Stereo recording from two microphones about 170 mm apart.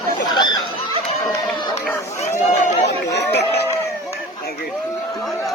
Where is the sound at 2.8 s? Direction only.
80° left.